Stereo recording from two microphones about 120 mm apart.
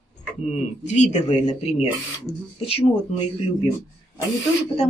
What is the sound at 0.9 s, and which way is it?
Speech, 70° left (ahead or behind).